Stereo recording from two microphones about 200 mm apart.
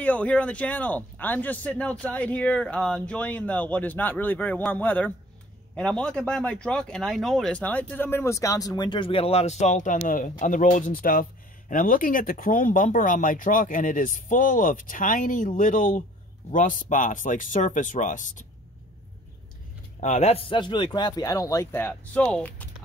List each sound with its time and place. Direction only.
0.0 s speech: 5° left (ahead or behind); by 18.5 s 40° left (ahead or behind)
20.0 s a man's voice: 35° left (ahead or behind); by 22.7 s 5° left (ahead or behind)